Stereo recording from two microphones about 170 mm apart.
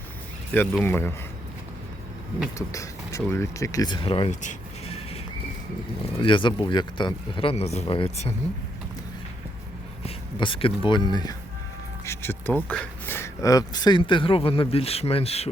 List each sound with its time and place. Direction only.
0.5 s speech: 10° left (ahead or behind)
2.6 s speech: 20° left (ahead or behind)
4.3 s sheep: 40° left (ahead or behind)
6.1 s speech: 30° left (ahead or behind)
10.4 s speech: 30° left (ahead or behind)
12.0 s speech: 15° left (ahead or behind); by 15.4 s 35° left (ahead or behind)